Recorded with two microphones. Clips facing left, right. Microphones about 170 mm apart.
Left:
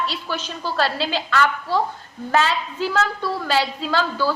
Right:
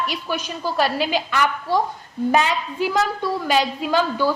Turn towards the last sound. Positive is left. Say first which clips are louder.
# right 2 dB
turn(degrees=-15)  # may be behind; listen again after turning